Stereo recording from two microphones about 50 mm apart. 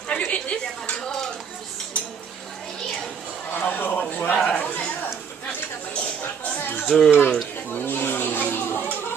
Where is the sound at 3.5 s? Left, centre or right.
Left.